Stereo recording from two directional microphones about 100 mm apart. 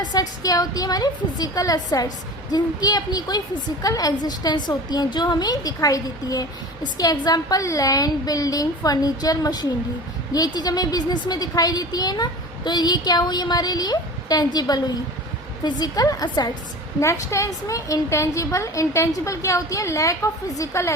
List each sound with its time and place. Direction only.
0.0 s a woman's voice: 40° left (ahead or behind)
17.0 s a woman's voice: 30° left (ahead or behind)